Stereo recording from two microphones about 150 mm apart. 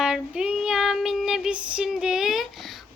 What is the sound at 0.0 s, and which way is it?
Child singing, 5° right (ahead or behind).